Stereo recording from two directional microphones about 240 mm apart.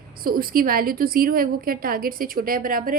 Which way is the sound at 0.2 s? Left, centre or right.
Right.